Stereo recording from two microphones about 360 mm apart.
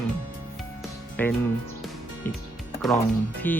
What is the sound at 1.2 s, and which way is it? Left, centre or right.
Speech, centre.